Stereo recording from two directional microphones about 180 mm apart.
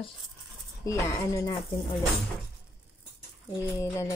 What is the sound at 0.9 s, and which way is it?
Speech, 15° left (ahead or behind).